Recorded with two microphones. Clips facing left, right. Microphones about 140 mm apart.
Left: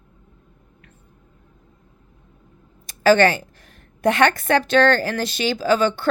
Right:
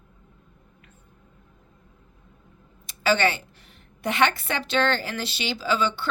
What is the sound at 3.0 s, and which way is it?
A woman's voice, 45° left (ahead or behind).